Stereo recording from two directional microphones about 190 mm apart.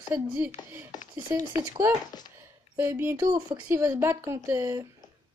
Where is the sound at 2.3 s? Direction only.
10° right (ahead or behind).